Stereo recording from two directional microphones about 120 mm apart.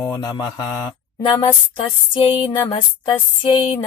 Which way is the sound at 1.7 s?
45° left (ahead or behind).